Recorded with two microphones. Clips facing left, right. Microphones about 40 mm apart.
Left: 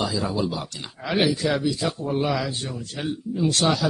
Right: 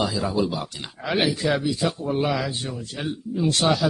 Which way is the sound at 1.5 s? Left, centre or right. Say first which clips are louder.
Right 1 dB; centre.